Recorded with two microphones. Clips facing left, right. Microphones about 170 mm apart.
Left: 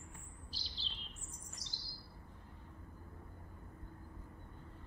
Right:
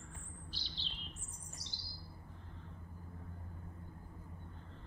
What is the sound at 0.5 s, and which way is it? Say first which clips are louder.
Bird: right 2 dB; 35° left (ahead or behind).